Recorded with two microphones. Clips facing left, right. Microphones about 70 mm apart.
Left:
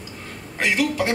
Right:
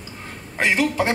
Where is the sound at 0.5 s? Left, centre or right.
Right.